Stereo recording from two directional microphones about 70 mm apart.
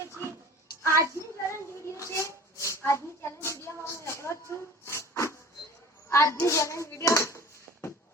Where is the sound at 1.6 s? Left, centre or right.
Left.